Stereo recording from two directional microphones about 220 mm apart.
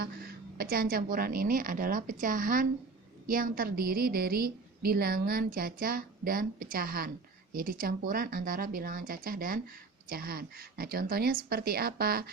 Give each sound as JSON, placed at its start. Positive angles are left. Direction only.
{"t": 0.0, "sound": "a woman's voice", "side_deg": -45}